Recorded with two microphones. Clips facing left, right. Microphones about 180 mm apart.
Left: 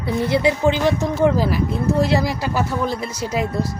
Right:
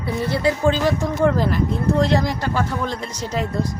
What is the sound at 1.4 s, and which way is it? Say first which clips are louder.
Speech: even; 5° left (ahead or behind).